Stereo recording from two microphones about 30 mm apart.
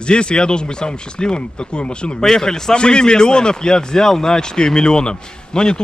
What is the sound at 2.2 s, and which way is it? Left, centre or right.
Speech, centre.